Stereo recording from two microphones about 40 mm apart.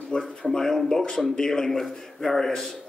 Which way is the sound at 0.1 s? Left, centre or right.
Left.